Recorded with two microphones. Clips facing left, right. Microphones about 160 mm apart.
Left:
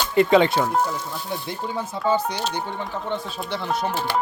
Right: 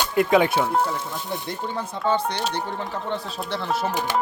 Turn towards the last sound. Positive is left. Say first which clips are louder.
# even
turn(degrees=0)  # may be behind; listen again after turning